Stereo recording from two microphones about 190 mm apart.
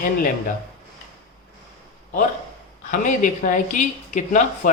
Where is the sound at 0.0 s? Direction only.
45° left (ahead or behind).